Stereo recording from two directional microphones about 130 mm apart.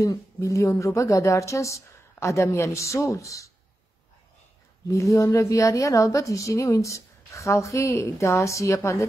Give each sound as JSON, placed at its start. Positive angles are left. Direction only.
{"t": 0.0, "sound": "a woman's voice", "side_deg": 25}
{"t": 4.8, "sound": "a woman's voice", "side_deg": 25}